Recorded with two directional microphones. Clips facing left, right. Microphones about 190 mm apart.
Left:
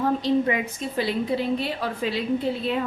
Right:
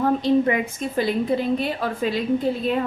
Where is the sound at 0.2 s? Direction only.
50° right (ahead or behind).